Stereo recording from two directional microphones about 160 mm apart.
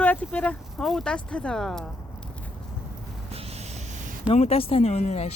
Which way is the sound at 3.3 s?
40° right (ahead or behind).